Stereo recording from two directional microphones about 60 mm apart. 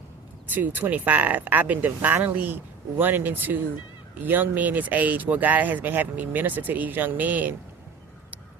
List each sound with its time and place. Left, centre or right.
0.5 s speech: right